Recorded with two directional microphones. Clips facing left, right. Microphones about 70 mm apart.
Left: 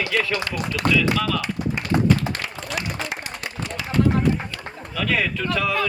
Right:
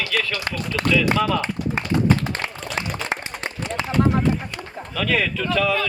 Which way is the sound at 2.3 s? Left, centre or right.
Right.